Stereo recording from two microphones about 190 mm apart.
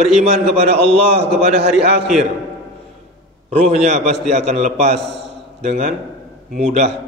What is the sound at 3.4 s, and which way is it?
A man's voice, 35° right (ahead or behind).